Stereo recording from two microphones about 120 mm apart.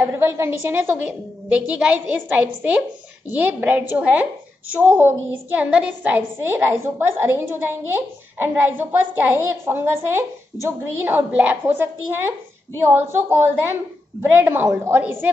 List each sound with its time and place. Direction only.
0.0 s a woman's voice: 20° right (ahead or behind)